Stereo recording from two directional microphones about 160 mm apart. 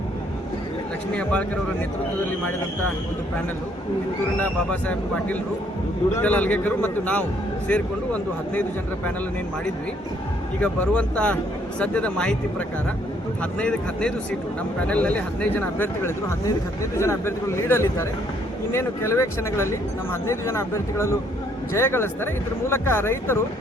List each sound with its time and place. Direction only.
1.1 s speech: 5° left (ahead or behind)
4.4 s speech: 10° left (ahead or behind)
10.6 s speech: 5° left (ahead or behind)